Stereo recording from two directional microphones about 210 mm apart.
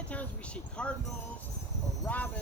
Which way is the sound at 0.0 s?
5° left (ahead or behind).